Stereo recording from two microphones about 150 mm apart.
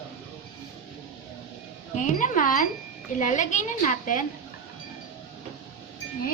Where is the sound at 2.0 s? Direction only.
60° left (ahead or behind).